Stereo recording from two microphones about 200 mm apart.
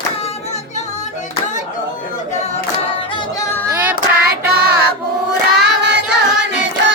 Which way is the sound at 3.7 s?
10° right (ahead or behind).